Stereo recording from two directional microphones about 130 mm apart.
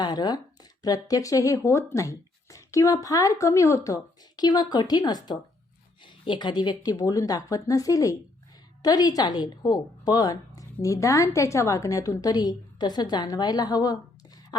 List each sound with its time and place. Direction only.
0.0 s speech: 30° left (ahead or behind)